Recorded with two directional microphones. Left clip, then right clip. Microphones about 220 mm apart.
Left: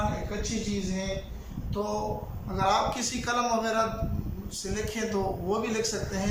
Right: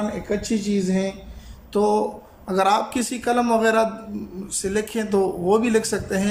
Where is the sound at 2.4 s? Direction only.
45° right (ahead or behind).